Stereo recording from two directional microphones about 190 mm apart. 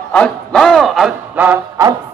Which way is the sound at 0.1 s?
5° left (ahead or behind).